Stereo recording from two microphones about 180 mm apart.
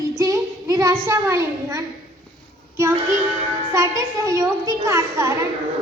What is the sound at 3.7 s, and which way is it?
A child's voice, 15° right (ahead or behind).